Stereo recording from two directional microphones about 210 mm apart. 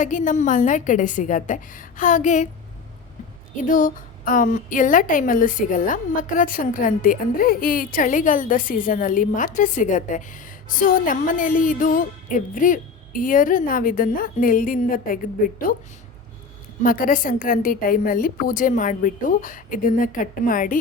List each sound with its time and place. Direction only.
0.0 s a woman's voice: 35° left (ahead or behind)
3.5 s a woman's voice: 40° left (ahead or behind)
16.8 s a woman's voice: 40° left (ahead or behind)